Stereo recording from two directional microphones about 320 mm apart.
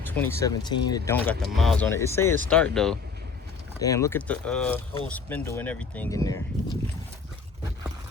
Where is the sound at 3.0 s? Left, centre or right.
Right.